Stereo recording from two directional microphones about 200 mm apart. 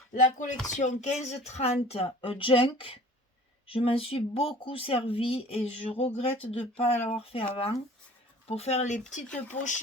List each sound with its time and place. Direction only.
0.1 s speech: 40° left (ahead or behind)